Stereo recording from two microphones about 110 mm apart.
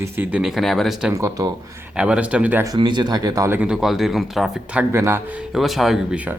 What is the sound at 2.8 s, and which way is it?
Speech, 45° right (ahead or behind).